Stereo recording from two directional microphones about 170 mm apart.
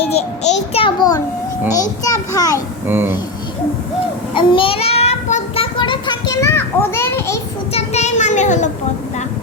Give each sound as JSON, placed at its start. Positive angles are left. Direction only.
{"t": 0.0, "sound": "a child's voice", "side_deg": 40}
{"t": 2.8, "sound": "speech", "side_deg": -15}
{"t": 4.4, "sound": "child singing", "side_deg": 30}
{"t": 7.7, "sound": "child singing", "side_deg": 40}